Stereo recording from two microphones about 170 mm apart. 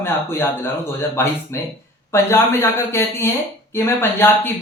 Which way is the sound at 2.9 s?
15° left (ahead or behind).